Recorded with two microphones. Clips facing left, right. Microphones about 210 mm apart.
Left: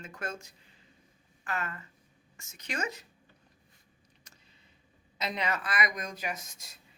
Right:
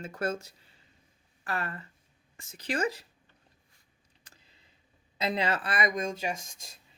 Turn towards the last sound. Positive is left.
turn(degrees=-25)  # may be behind; listen again after turning